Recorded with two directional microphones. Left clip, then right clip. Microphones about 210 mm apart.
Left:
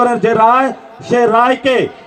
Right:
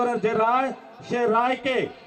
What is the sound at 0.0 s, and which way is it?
A man's voice, 55° left (ahead or behind).